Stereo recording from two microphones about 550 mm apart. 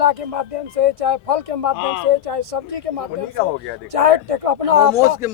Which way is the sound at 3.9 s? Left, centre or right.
Right.